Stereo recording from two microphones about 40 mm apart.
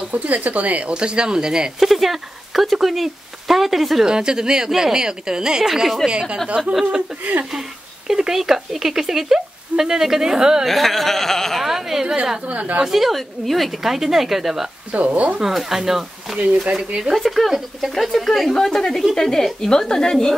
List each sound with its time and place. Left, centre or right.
0.1 s speech: right; by 1.7 s centre
1.8 s speech: centre
4.0 s speech: centre
6.0 s speech: right
8.1 s speech: centre
10.6 s speech: centre
11.6 s speech: centre
12.4 s speech: right
12.8 s speech: centre
14.9 s speech: right
15.3 s a woman's voice: centre